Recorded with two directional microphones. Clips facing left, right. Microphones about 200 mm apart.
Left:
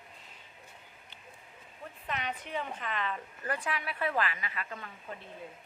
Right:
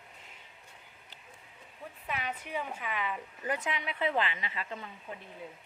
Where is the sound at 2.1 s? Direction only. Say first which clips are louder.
Even; 5° right (ahead or behind); by 4.8 s 25° right (ahead or behind).